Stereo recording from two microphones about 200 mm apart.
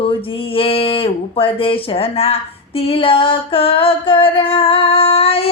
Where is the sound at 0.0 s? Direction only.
25° left (ahead or behind).